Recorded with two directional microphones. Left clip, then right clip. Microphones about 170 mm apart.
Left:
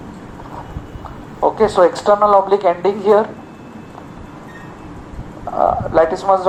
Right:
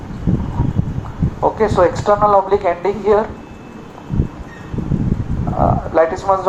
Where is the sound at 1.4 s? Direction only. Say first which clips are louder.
Left 1 dB; 35° left (ahead or behind).